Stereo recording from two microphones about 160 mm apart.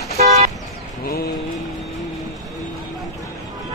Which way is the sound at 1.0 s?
70° left (ahead or behind).